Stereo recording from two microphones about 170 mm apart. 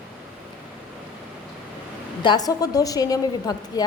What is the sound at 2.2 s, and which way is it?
A woman's voice, 25° left (ahead or behind).